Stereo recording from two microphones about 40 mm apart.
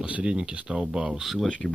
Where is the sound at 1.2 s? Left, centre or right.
Centre.